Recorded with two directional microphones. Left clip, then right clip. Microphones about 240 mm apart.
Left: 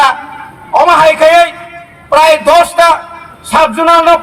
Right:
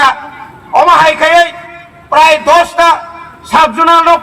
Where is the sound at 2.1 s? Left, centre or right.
Left.